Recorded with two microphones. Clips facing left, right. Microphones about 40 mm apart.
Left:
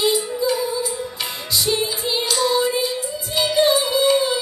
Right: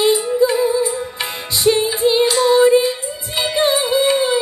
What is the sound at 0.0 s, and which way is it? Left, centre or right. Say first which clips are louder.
Music: right 6 dB; right.